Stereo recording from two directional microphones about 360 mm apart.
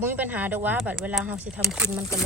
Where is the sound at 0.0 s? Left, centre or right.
Centre.